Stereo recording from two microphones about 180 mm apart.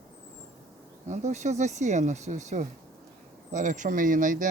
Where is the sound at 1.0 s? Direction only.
40° right (ahead or behind).